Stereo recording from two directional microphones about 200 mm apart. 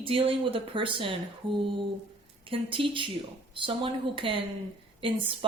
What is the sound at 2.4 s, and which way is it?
A woman's voice, 25° right (ahead or behind).